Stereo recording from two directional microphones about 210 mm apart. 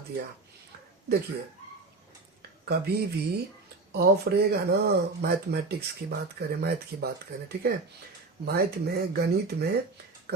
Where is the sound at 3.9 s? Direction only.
50° right (ahead or behind).